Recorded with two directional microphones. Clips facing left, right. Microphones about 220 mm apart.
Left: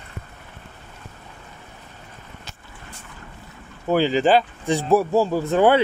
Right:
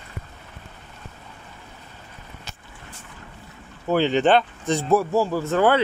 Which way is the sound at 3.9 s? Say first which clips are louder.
Left 1 dB; 5° left (ahead or behind).